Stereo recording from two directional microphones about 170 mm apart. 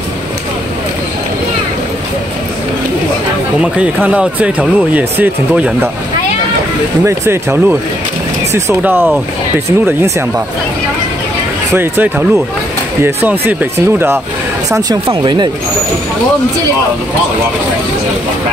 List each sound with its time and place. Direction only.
3.6 s speech: 5° right (ahead or behind)
7.1 s speech: 15° right (ahead or behind)
11.7 s speech: 10° right (ahead or behind)
15.0 s speech: 25° right (ahead or behind)